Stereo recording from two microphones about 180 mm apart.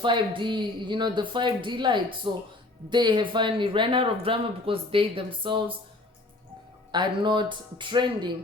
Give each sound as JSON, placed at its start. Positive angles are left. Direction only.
{"t": 0.0, "sound": "speech", "side_deg": -25}
{"t": 6.9, "sound": "speech", "side_deg": -25}